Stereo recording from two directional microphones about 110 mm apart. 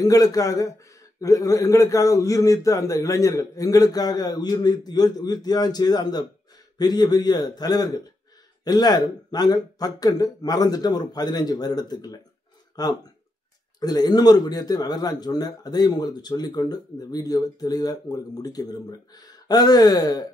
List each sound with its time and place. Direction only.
0.0 s speech: 30° left (ahead or behind)